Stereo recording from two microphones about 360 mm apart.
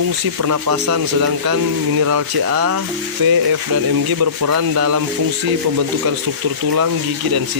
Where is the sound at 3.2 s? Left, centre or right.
Right.